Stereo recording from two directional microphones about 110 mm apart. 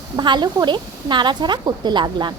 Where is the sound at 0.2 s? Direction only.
40° right (ahead or behind).